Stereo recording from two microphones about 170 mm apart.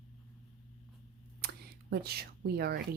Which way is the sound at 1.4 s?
65° right (ahead or behind).